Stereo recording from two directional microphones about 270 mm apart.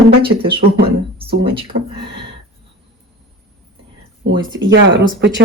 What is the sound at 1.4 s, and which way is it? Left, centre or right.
Speech, centre.